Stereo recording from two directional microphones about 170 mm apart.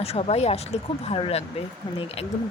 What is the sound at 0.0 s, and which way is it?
Speech, 35° left (ahead or behind).